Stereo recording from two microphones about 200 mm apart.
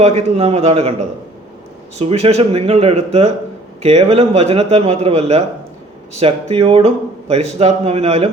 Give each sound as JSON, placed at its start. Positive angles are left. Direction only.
{"t": 0.0, "sound": "a man's voice", "side_deg": -30}
{"t": 2.0, "sound": "a man's voice", "side_deg": -30}